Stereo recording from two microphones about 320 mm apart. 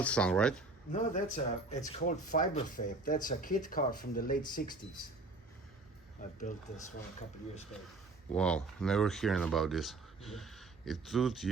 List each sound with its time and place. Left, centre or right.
0.0 s speech: centre
0.9 s speech: left
8.3 s speech: centre